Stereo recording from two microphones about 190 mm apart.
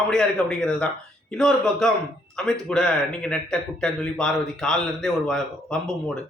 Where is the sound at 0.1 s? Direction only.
Centre (ahead or behind).